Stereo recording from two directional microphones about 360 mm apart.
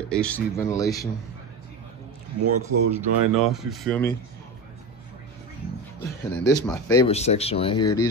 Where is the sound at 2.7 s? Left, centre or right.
Right.